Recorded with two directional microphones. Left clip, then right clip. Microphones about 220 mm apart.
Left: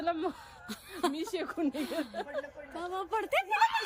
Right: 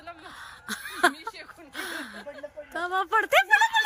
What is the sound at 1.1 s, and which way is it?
Speech, 35° left (ahead or behind).